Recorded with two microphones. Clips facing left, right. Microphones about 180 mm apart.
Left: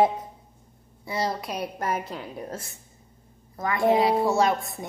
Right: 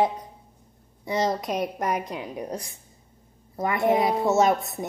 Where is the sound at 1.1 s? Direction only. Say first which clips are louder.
Right 4 dB; 20° right (ahead or behind).